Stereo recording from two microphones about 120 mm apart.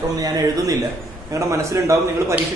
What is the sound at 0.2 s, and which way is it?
A man's voice, 30° right (ahead or behind).